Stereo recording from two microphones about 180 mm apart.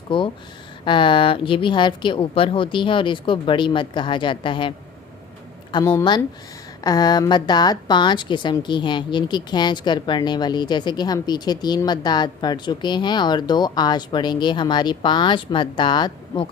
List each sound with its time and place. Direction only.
0.1 s a woman's voice: 30° left (ahead or behind)
5.8 s a woman's voice: 15° left (ahead or behind)